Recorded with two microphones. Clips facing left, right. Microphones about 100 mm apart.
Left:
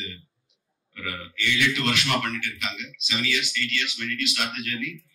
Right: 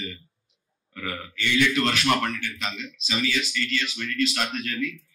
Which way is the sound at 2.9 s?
35° right (ahead or behind).